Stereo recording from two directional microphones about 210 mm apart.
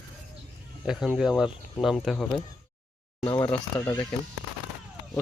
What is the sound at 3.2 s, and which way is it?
Speech, 20° left (ahead or behind).